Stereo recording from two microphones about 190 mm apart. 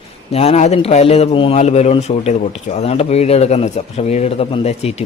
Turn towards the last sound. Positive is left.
turn(degrees=35)  # may be behind; listen again after turning